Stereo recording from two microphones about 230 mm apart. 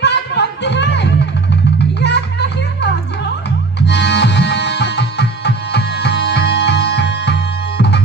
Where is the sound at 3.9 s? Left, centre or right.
Left.